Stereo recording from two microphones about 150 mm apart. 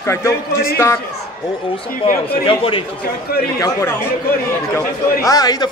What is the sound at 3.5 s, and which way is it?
A man's voice, 20° left (ahead or behind).